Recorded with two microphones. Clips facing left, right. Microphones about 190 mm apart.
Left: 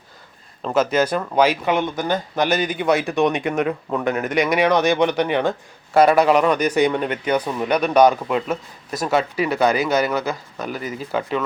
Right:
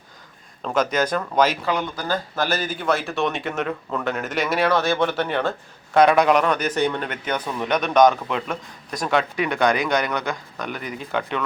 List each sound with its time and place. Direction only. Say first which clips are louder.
0.6 s speech: left 3 dB; 5° left (ahead or behind)